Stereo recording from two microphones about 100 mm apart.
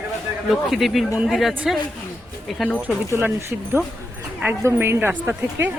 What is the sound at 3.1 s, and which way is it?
A woman's voice, 25° right (ahead or behind).